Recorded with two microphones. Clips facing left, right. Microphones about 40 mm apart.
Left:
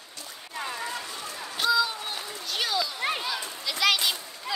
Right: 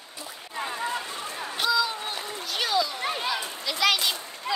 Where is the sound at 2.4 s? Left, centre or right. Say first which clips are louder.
Right 3 dB; centre.